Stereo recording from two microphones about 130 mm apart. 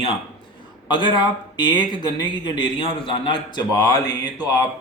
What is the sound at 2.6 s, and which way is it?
Speech, 40° left (ahead or behind).